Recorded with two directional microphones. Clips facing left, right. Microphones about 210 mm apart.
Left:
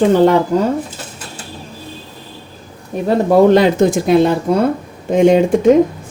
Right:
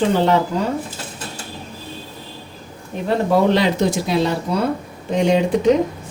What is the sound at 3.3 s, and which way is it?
Speech, 50° left (ahead or behind).